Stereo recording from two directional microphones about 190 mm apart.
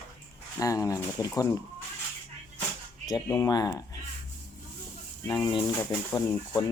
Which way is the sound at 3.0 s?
15° left (ahead or behind).